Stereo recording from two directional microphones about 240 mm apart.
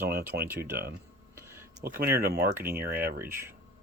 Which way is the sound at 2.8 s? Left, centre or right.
Right.